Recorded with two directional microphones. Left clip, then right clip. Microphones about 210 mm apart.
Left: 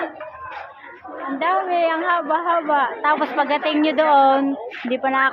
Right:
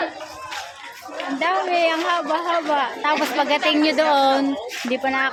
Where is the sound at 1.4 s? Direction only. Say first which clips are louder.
Left 1 dB; 10° right (ahead or behind).